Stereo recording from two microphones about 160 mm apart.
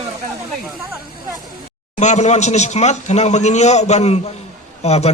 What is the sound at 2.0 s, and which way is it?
A man's voice, 45° left (ahead or behind).